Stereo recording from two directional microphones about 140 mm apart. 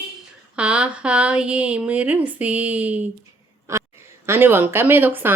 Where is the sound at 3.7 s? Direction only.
20° right (ahead or behind).